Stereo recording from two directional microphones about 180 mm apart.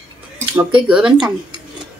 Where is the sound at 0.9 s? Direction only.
5° right (ahead or behind).